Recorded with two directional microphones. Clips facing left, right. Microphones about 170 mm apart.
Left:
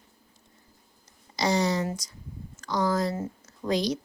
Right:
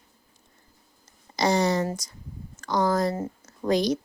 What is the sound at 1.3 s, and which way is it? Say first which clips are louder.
Speech: right 3 dB; 50° right (ahead or behind).